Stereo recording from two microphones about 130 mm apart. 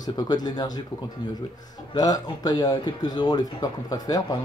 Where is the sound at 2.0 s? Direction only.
30° left (ahead or behind).